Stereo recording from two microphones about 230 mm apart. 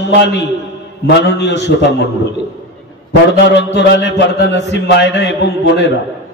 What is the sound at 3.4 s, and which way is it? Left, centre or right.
A man's voice, left.